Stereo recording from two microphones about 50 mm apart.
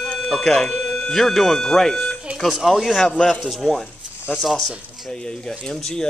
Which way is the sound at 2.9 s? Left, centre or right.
Centre.